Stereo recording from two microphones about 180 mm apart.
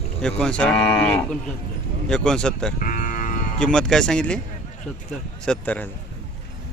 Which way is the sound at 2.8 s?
50° left (ahead or behind).